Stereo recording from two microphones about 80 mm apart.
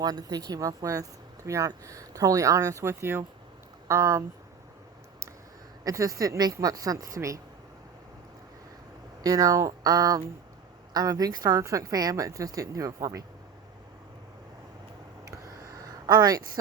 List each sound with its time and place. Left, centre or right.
0.0 s a woman's voice: right
5.8 s speech: right
9.2 s speech: right
11.6 s speech: right
15.2 s a sound: right